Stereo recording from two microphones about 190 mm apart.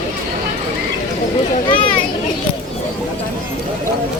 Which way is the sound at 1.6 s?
25° left (ahead or behind).